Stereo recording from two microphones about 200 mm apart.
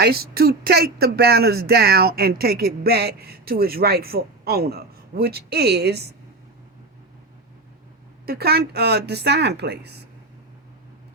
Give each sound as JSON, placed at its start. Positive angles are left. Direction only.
{"t": 0.0, "sound": "speech", "side_deg": -50}
{"t": 8.3, "sound": "speech", "side_deg": -50}